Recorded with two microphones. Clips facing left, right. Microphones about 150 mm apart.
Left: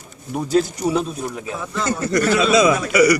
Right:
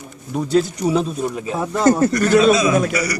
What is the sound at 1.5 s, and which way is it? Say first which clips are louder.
Speech: right 10 dB; 45° right (ahead or behind).